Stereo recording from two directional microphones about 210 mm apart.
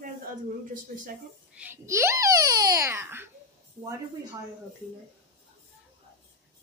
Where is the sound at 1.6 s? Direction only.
10° right (ahead or behind).